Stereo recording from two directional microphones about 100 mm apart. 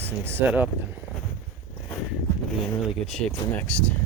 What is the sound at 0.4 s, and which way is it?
Speech, 15° right (ahead or behind).